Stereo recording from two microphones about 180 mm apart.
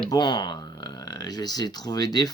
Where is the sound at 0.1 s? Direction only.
25° left (ahead or behind).